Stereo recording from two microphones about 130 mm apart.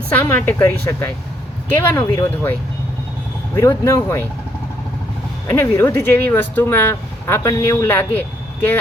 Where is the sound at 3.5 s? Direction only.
20° left (ahead or behind).